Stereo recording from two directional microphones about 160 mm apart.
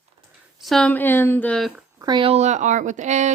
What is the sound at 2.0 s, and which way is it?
Speech, 30° right (ahead or behind).